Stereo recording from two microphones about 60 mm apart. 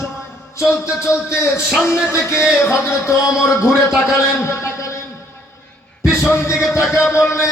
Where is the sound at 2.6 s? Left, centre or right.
Left.